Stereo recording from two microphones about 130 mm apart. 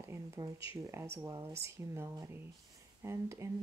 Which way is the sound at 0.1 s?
25° right (ahead or behind).